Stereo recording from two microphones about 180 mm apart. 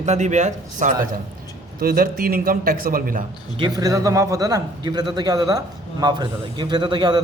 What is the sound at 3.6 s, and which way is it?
Speech, 20° right (ahead or behind).